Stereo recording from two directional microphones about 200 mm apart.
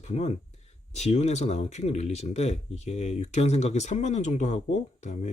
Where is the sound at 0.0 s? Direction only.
30° left (ahead or behind).